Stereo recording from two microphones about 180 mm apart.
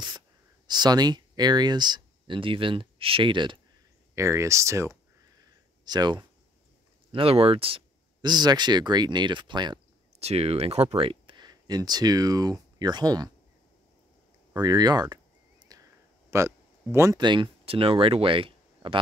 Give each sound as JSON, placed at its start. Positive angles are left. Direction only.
{"t": 0.7, "sound": "speech", "side_deg": -25}
{"t": 4.1, "sound": "speech", "side_deg": -15}
{"t": 10.1, "sound": "speech", "side_deg": -35}
{"t": 14.5, "sound": "speech", "side_deg": -20}
{"t": 15.7, "sound": "a sound", "side_deg": -20}
{"t": 16.9, "sound": "speech", "side_deg": -15}